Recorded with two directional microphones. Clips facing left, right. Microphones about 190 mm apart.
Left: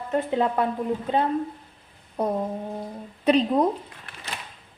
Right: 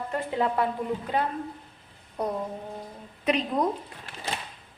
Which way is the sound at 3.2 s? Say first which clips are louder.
Left 6 dB; 35° left (ahead or behind).